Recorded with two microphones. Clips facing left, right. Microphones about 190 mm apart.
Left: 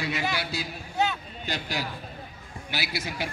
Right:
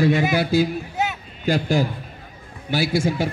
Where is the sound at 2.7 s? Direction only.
45° right (ahead or behind).